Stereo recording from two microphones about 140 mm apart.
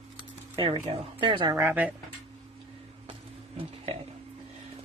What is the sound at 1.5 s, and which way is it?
Speech, 15° right (ahead or behind).